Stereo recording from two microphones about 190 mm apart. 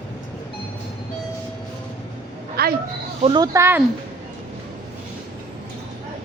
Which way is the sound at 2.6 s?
55° right (ahead or behind).